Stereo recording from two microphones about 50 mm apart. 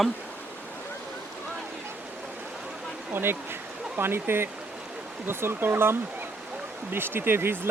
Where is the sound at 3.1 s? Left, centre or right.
Right.